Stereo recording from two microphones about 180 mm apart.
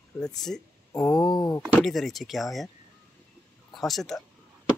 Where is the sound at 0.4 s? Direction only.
5° left (ahead or behind).